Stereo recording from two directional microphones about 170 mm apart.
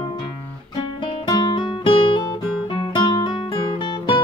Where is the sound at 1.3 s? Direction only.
25° left (ahead or behind).